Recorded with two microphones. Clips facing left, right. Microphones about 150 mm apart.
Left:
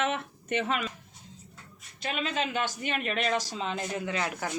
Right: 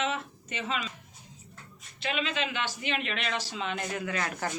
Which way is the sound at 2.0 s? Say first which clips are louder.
Even; 45° left (ahead or behind).